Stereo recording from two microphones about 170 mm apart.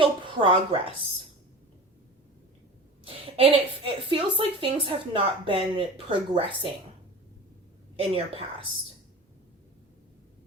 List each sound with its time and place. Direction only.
0.0 s a woman's voice: 30° right (ahead or behind)
3.0 s a sound: 30° right (ahead or behind)
4.1 s speech: 30° right (ahead or behind)
7.9 s speech: 35° right (ahead or behind)